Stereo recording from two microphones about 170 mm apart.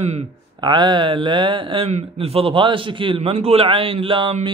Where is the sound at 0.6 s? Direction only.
25° right (ahead or behind).